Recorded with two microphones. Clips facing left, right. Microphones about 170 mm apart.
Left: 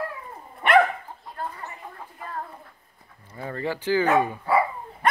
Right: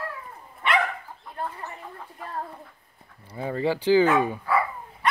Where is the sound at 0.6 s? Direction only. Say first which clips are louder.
Left 6 dB; 55° left (ahead or behind).